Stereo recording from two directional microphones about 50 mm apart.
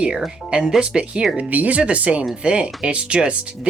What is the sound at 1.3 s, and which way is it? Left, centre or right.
Speech, right.